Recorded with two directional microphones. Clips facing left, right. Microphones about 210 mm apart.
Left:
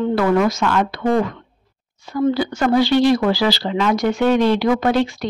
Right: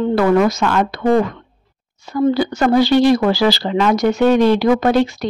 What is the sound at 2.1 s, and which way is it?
Speech, 40° right (ahead or behind).